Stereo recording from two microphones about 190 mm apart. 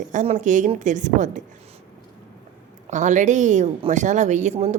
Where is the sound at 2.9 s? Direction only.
40° right (ahead or behind).